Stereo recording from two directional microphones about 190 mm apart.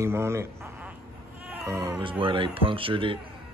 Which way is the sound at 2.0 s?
25° right (ahead or behind).